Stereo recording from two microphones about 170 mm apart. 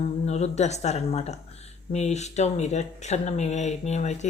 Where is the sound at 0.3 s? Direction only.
40° left (ahead or behind).